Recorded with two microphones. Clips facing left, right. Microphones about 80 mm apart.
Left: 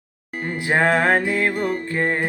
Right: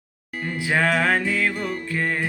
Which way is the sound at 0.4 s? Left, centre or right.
Left.